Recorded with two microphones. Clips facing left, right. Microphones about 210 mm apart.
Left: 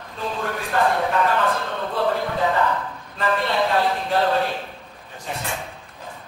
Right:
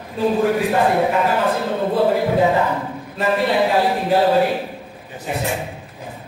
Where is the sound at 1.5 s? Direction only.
30° right (ahead or behind).